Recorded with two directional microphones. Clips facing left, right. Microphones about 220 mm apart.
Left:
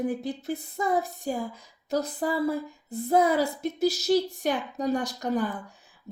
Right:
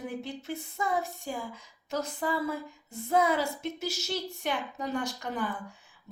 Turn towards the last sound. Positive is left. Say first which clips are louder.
# left 3 dB
turn(degrees=40)  # may be behind; listen again after turning